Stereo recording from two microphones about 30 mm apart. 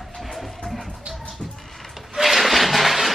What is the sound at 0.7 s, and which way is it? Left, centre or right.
Music, centre.